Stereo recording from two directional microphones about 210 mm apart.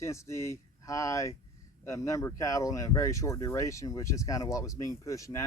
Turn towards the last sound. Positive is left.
turn(degrees=15)  # may be behind; listen again after turning